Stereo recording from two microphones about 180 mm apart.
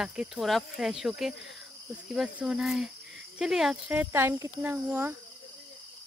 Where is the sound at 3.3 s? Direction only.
5° right (ahead or behind).